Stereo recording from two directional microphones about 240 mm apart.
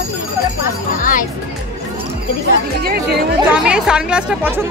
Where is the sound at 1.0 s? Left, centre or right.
Left.